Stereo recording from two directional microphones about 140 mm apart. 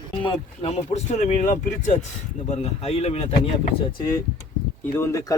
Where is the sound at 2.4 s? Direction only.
50° left (ahead or behind).